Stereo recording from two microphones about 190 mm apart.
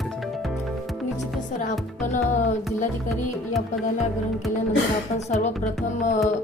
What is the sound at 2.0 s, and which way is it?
Music, 40° left (ahead or behind).